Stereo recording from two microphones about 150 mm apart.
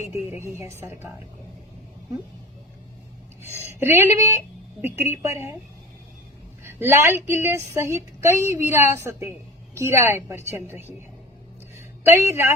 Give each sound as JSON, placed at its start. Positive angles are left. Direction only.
{"t": 0.3, "sound": "a woman's voice", "side_deg": -15}
{"t": 3.8, "sound": "a woman's voice", "side_deg": -15}
{"t": 6.7, "sound": "a woman's voice", "side_deg": -15}
{"t": 12.0, "sound": "a woman's voice", "side_deg": -15}